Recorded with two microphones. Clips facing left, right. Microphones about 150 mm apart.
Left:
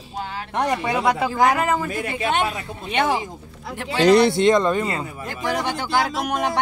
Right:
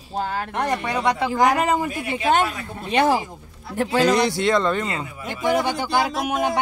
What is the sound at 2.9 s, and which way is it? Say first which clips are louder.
Speech: right 3 dB; 35° right (ahead or behind).